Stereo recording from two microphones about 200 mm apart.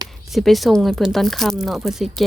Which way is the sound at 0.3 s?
Centre (ahead or behind).